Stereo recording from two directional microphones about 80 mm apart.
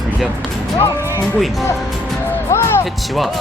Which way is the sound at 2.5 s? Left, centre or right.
Left.